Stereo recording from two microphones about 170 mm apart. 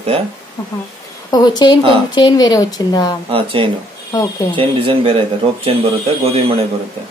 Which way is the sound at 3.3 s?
30° right (ahead or behind).